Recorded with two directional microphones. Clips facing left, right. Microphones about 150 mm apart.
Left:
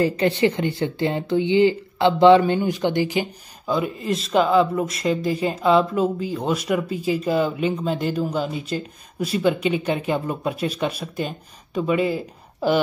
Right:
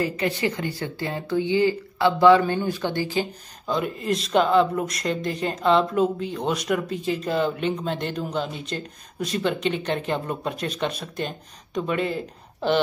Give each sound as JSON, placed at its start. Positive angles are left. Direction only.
{"t": 0.0, "sound": "speech", "side_deg": 30}